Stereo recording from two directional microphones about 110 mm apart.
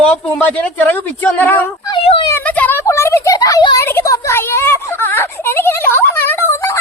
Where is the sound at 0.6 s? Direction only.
20° left (ahead or behind).